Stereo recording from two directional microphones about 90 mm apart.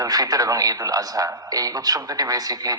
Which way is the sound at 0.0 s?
45° right (ahead or behind).